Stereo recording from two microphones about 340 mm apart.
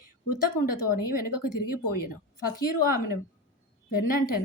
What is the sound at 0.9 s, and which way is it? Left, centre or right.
Speech, left.